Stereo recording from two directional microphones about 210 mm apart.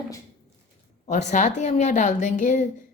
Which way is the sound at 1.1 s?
35° left (ahead or behind).